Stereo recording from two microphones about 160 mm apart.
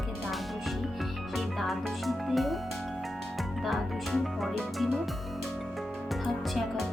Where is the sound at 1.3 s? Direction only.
Centre (ahead or behind).